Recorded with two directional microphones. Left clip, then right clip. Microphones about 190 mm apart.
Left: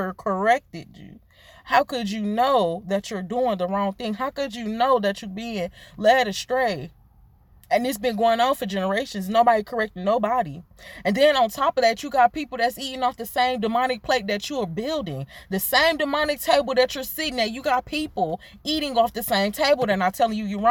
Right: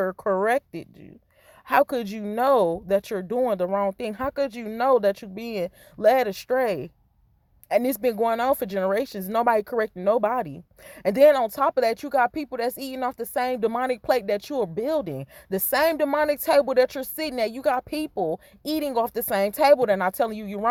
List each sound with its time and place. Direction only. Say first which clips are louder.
0.0 s speech: even; 35° right (ahead or behind)